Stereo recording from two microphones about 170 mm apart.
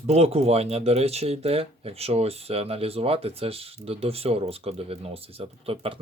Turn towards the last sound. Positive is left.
turn(degrees=-30)  # may be behind; listen again after turning